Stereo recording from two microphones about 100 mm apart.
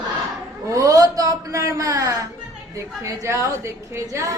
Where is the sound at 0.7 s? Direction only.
35° right (ahead or behind).